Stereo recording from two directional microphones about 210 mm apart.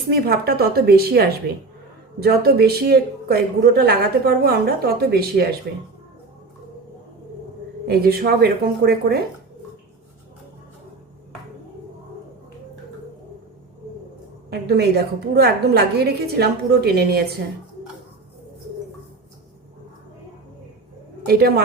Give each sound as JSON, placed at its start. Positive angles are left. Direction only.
{"t": 0.1, "sound": "speech", "side_deg": -50}
{"t": 7.9, "sound": "speech", "side_deg": -45}
{"t": 14.5, "sound": "speech", "side_deg": -50}
{"t": 21.2, "sound": "speech", "side_deg": -50}